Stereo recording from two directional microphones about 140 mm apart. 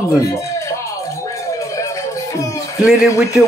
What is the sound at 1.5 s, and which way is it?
Music, 20° left (ahead or behind).